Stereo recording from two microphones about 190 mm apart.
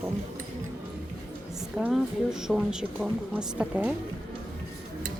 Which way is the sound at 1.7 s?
5° right (ahead or behind).